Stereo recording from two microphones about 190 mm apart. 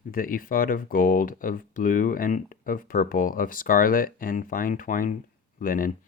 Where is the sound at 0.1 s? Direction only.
50° left (ahead or behind).